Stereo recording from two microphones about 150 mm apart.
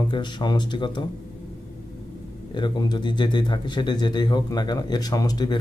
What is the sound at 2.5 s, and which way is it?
Speech, 30° left (ahead or behind).